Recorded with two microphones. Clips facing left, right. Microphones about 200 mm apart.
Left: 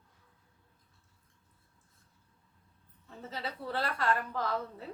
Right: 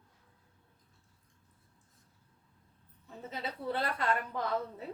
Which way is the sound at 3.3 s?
20° right (ahead or behind).